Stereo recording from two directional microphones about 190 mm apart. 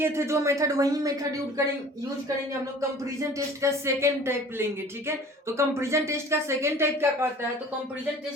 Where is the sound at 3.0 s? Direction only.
15° right (ahead or behind).